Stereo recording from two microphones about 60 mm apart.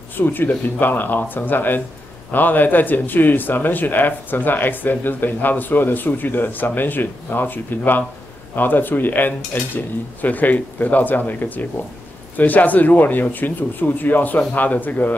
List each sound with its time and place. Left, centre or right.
0.1 s speech: left